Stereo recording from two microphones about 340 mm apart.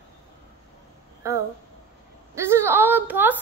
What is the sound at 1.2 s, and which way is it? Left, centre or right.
Speech, centre.